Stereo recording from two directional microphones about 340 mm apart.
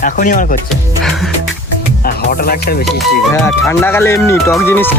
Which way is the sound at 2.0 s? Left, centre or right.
Left.